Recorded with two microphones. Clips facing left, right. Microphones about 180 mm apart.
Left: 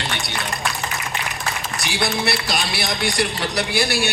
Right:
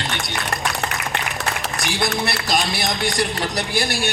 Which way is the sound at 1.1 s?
65° right (ahead or behind).